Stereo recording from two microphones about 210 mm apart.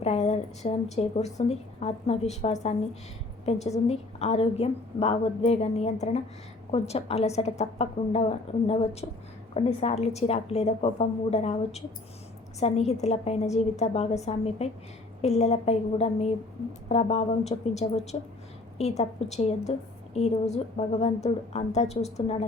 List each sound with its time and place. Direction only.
0.0 s a woman's voice: 30° left (ahead or behind)